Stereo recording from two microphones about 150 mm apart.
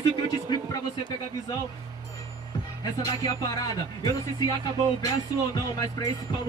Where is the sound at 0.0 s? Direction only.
30° left (ahead or behind).